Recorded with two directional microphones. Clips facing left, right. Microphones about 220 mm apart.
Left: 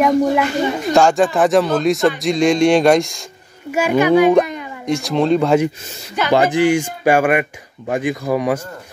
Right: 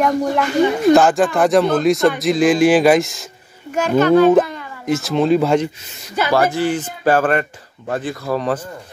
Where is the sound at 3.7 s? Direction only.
10° left (ahead or behind).